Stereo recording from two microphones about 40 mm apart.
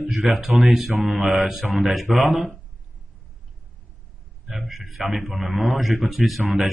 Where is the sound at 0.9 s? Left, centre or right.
Right.